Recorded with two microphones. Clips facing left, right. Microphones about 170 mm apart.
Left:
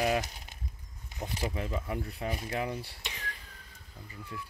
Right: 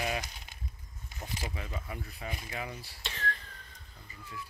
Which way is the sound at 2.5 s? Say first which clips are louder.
Left 6 dB; 55° left (ahead or behind).